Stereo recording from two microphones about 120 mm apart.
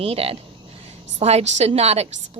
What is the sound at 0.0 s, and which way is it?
A woman's voice, 55° right (ahead or behind).